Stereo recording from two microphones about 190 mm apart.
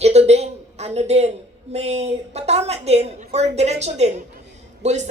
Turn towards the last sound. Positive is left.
turn(degrees=-35)  # may be behind; listen again after turning